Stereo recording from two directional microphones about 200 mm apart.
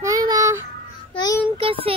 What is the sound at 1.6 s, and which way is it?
Child singing, 25° right (ahead or behind).